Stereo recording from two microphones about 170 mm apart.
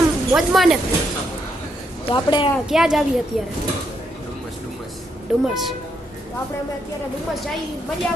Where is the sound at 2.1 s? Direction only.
30° left (ahead or behind).